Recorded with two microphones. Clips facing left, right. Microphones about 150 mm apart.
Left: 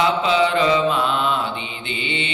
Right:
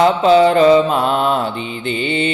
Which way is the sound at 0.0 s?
45° right (ahead or behind).